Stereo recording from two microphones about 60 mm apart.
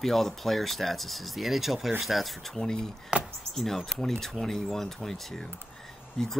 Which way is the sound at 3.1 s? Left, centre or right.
Centre.